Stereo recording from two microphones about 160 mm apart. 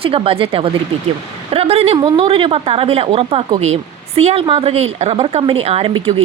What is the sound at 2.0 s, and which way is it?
Speech, 30° right (ahead or behind).